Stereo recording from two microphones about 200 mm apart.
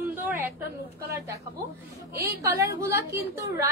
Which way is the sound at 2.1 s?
50° right (ahead or behind).